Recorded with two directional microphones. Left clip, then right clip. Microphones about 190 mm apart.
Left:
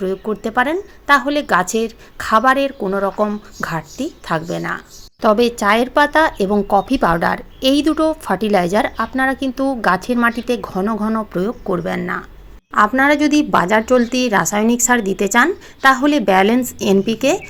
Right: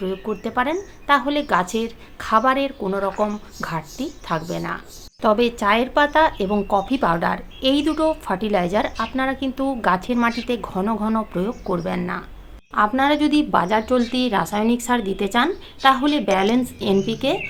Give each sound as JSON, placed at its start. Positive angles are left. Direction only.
{"t": 0.0, "sound": "a woman's voice", "side_deg": 30}